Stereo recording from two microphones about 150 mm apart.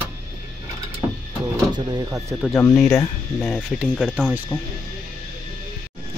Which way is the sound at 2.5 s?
15° left (ahead or behind).